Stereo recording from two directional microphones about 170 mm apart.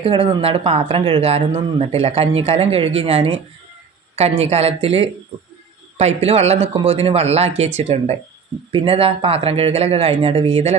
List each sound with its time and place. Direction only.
0.0 s speech: 30° right (ahead or behind)
6.2 s speech: 40° right (ahead or behind)